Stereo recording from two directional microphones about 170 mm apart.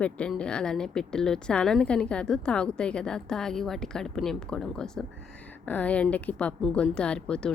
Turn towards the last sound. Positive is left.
turn(degrees=5)  # may be behind; listen again after turning